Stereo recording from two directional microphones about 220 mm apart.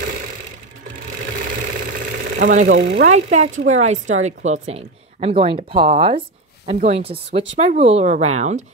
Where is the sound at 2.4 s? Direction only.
35° right (ahead or behind).